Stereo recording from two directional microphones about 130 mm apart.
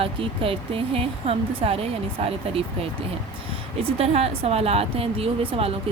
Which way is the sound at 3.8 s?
50° right (ahead or behind).